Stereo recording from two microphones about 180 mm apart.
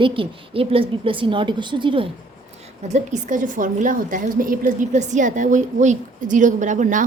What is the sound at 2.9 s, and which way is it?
A woman's voice, 45° right (ahead or behind).